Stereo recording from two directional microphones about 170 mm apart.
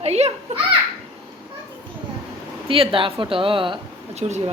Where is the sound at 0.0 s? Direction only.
40° right (ahead or behind).